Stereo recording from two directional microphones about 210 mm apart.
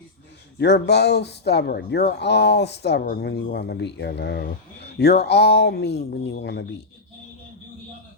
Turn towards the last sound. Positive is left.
turn(degrees=55)  # may be behind; listen again after turning